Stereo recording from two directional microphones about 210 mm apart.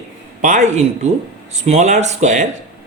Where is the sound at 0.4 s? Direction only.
35° right (ahead or behind).